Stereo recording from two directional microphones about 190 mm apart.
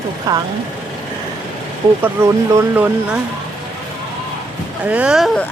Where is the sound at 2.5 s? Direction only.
10° right (ahead or behind).